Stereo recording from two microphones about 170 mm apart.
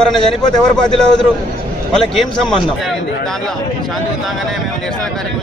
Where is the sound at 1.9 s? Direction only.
5° left (ahead or behind).